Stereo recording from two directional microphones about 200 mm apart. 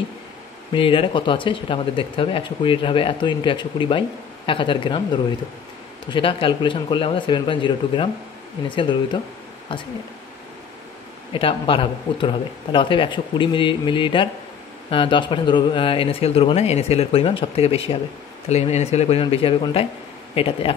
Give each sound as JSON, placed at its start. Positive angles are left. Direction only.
{"t": 0.7, "sound": "speech", "side_deg": 25}
{"t": 11.3, "sound": "speech", "side_deg": 25}